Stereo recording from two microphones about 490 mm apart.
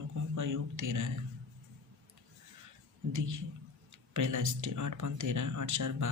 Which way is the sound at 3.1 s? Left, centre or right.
Right.